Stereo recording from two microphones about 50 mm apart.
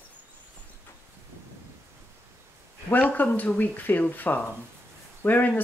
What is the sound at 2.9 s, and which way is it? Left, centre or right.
Speech, left.